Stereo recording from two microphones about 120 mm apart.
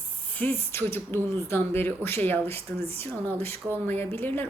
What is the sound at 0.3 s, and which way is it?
Speech, 15° left (ahead or behind).